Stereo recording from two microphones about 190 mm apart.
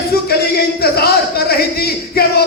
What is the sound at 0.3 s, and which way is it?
Speech, 55° left (ahead or behind).